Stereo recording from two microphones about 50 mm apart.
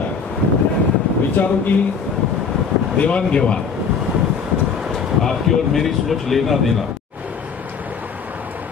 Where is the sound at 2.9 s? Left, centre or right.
Left.